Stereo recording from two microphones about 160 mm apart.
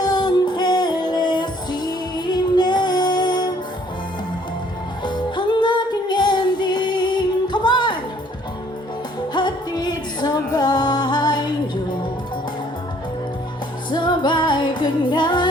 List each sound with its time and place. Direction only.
0.0 s music: 25° left (ahead or behind)
5.0 s music: 30° left (ahead or behind)
9.3 s music: 25° left (ahead or behind)
13.9 s music: 30° left (ahead or behind)